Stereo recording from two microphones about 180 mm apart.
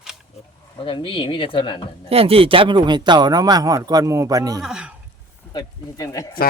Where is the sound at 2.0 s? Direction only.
30° right (ahead or behind).